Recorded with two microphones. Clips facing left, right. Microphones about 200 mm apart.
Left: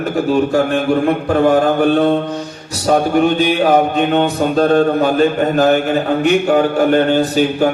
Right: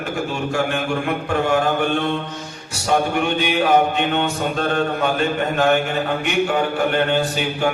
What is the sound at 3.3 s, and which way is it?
Speech, 40° left (ahead or behind).